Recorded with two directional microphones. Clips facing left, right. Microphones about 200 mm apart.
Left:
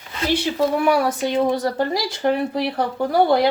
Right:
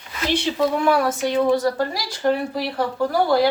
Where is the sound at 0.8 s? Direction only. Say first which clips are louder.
Left 1 dB; 10° left (ahead or behind).